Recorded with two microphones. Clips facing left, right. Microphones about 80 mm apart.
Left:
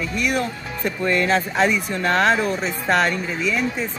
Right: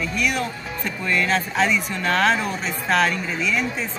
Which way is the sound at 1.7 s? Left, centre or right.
Centre.